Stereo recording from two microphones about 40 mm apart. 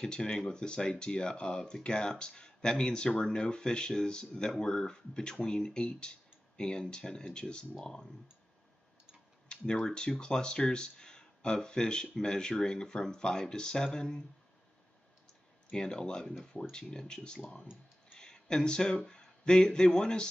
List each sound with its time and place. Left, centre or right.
0.0 s speech: centre
9.8 s speech: centre
15.7 s speech: centre